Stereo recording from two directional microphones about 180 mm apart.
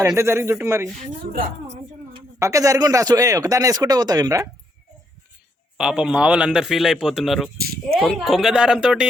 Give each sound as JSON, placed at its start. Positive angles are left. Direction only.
{"t": 0.2, "sound": "a man's voice", "side_deg": -15}
{"t": 2.4, "sound": "speech", "side_deg": -20}
{"t": 5.7, "sound": "a man's voice", "side_deg": -5}